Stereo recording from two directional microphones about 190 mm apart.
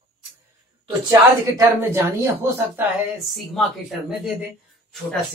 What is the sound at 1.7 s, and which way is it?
Speech, 10° right (ahead or behind).